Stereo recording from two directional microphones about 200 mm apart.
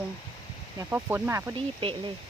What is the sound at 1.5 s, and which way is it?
Speech, 25° right (ahead or behind).